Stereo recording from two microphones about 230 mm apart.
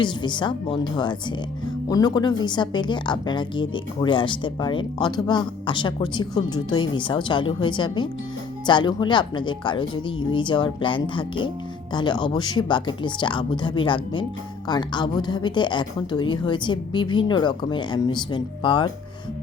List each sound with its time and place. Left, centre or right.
0.0 s a woman's voice: centre